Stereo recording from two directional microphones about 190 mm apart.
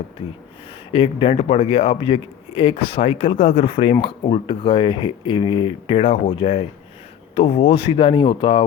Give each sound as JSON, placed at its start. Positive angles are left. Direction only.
{"t": 0.9, "sound": "speech", "side_deg": 30}